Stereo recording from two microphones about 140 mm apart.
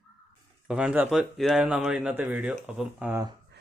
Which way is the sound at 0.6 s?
10° right (ahead or behind).